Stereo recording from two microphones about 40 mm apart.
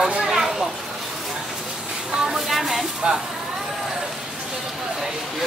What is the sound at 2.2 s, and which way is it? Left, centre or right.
Speech, centre.